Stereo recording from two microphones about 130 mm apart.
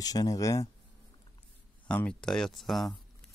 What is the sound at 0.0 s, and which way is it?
Speech, 30° left (ahead or behind).